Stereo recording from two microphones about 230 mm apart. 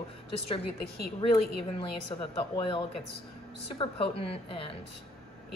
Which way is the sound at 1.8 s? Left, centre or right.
Centre.